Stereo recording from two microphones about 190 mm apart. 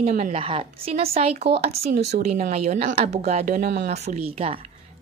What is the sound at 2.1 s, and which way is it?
Speech, 50° right (ahead or behind).